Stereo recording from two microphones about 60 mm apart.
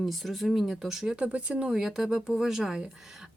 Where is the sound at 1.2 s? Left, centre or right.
Centre.